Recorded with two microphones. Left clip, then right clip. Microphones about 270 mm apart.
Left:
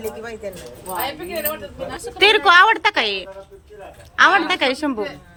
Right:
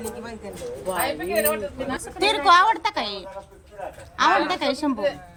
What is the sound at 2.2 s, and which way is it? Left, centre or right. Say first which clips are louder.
A woman's voice: left 5 dB; centre.